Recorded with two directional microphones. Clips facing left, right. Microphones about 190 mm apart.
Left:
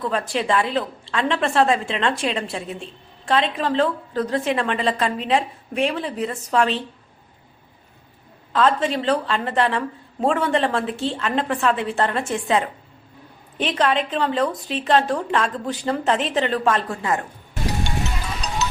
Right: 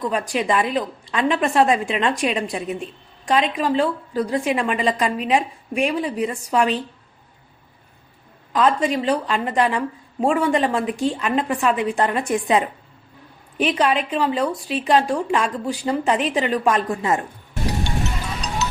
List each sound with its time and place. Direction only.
0.0 s a woman's voice: 15° right (ahead or behind)
8.5 s a woman's voice: 15° right (ahead or behind)